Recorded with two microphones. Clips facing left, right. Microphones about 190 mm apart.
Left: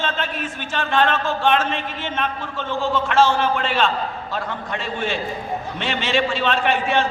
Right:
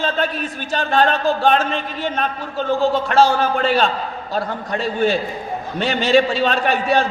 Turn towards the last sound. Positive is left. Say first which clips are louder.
# right 2 dB
turn(degrees=-35)  # may be behind; listen again after turning